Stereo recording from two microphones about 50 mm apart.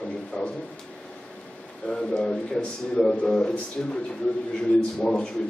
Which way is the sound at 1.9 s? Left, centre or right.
Centre.